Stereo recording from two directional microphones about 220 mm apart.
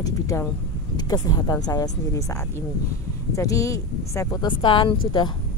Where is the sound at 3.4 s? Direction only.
15° left (ahead or behind).